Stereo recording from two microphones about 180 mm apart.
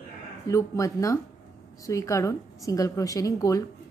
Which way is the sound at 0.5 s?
15° left (ahead or behind).